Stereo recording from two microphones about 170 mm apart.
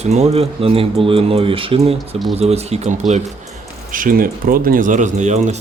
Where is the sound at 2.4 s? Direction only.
40° right (ahead or behind).